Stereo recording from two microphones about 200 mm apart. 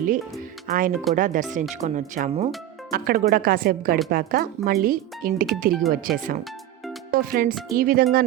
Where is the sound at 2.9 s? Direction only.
50° right (ahead or behind).